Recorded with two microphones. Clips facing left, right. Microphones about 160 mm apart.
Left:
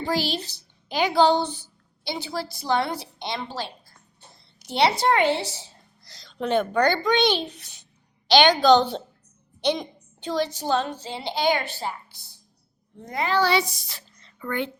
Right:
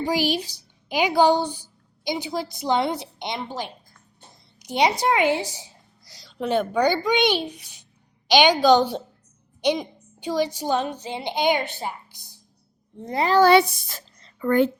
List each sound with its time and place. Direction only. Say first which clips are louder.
0.0 s a woman's voice: right 3 dB; 15° right (ahead or behind)
13.0 s a woman's voice: right 5 dB; 30° right (ahead or behind)